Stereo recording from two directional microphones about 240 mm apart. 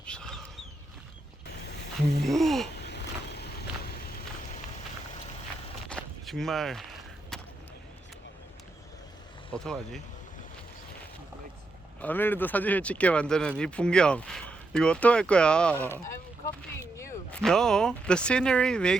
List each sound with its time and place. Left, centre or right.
0.0 s a sound: centre
2.2 s speech: centre
2.7 s vehicle: left
5.9 s a sound: centre
9.5 s speech: centre
11.9 s speech: centre
17.0 s speech: centre